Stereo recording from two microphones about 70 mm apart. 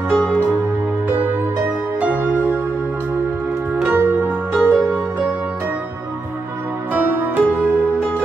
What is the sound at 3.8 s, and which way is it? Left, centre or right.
Music, right.